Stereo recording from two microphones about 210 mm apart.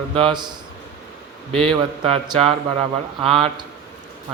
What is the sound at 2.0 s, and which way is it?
A man's voice, 30° right (ahead or behind).